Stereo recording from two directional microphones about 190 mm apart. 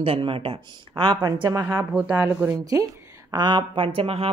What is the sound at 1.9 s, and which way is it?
Speech, 10° right (ahead or behind).